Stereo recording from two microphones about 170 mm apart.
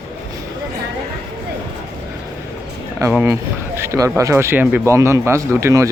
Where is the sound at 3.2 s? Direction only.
15° right (ahead or behind).